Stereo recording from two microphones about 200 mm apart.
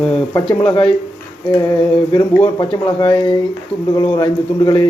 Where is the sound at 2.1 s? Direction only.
20° left (ahead or behind).